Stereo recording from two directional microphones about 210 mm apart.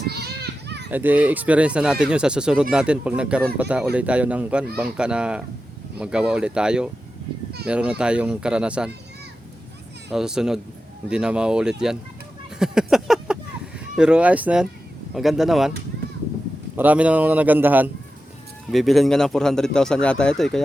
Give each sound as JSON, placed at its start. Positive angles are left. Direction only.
{"t": 0.0, "sound": "children playing", "side_deg": -50}
{"t": 0.9, "sound": "speech", "side_deg": -10}
{"t": 10.1, "sound": "speech", "side_deg": 0}
{"t": 12.5, "sound": "a sound", "side_deg": -5}
{"t": 15.1, "sound": "speech", "side_deg": 0}
{"t": 16.7, "sound": "a man's voice", "side_deg": -10}